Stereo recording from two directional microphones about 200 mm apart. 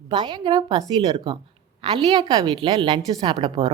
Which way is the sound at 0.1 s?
20° right (ahead or behind).